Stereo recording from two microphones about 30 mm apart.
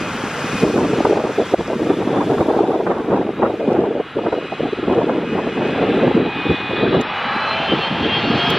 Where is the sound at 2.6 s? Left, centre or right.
Centre.